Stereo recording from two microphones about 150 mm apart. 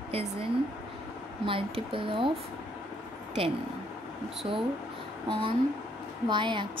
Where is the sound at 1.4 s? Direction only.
35° right (ahead or behind).